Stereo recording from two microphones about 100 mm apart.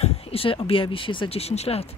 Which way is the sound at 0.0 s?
70° left (ahead or behind).